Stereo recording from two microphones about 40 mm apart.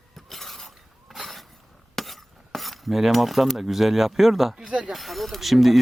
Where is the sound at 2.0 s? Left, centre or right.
Centre.